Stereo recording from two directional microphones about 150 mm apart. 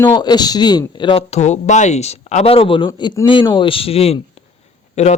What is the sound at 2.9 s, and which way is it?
Speech, 25° left (ahead or behind).